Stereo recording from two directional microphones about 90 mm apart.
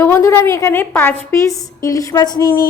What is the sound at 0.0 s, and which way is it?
A woman's voice, 30° left (ahead or behind).